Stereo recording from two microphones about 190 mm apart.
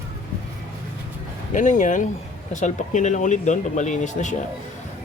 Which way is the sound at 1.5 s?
40° left (ahead or behind).